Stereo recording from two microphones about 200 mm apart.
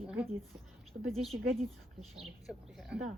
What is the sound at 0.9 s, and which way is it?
Speech, 50° right (ahead or behind).